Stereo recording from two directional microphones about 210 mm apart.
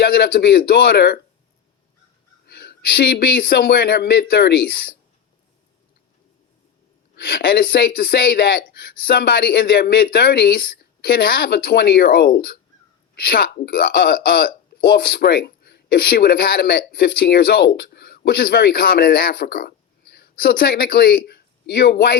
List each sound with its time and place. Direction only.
0.0 s a man's voice: 45° left (ahead or behind)
2.5 s speech: 45° left (ahead or behind)
7.2 s speech: 45° left (ahead or behind)